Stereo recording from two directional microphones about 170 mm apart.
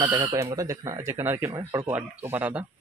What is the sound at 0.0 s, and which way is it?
A man's voice, 25° right (ahead or behind).